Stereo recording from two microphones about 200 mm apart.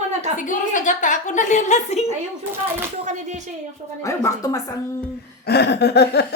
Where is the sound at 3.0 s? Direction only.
35° right (ahead or behind).